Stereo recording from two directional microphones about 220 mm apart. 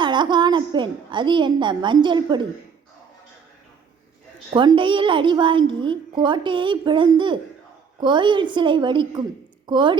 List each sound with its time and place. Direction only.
0.0 s a woman's voice: 20° right (ahead or behind)
4.5 s a woman's voice: 20° right (ahead or behind)